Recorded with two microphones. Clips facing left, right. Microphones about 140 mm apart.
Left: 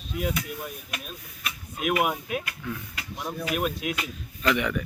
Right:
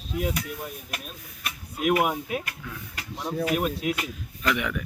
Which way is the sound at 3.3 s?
50° right (ahead or behind).